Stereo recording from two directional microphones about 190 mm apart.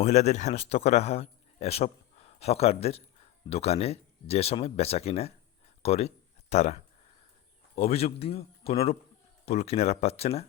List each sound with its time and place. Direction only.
0.0 s speech: 35° left (ahead or behind)